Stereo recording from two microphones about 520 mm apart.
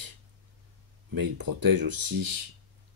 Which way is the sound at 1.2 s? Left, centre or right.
Right.